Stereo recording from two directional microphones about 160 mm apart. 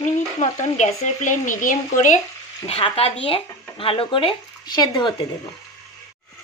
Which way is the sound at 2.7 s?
40° left (ahead or behind).